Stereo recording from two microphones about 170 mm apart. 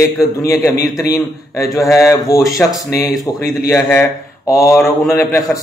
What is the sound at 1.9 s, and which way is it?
Speech, 20° left (ahead or behind).